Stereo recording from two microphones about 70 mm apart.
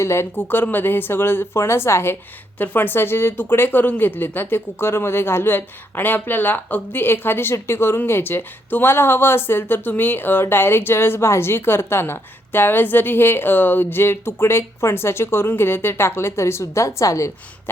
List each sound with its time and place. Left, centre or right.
0.0 s speech: left